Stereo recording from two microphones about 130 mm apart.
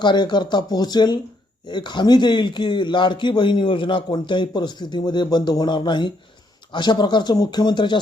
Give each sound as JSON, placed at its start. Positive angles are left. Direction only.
{"t": 0.0, "sound": "a man's voice", "side_deg": 35}